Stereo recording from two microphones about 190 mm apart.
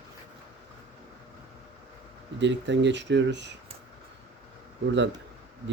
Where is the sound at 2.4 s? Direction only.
70° right (ahead or behind).